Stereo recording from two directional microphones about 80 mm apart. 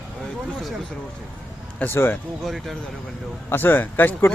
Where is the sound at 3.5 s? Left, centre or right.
Left.